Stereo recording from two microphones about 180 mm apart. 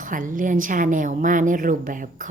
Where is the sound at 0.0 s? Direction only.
45° right (ahead or behind).